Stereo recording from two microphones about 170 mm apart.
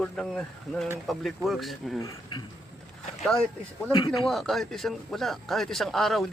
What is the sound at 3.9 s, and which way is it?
Speech, 30° left (ahead or behind).